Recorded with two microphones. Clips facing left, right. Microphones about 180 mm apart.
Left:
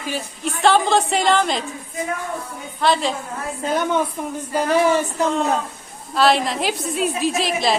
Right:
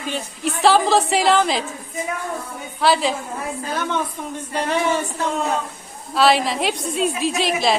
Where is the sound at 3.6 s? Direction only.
20° left (ahead or behind).